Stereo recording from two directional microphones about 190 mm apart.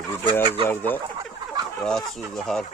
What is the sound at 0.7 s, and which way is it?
Speech, 10° left (ahead or behind).